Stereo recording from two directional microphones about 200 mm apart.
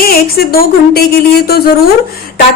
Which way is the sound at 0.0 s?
50° left (ahead or behind).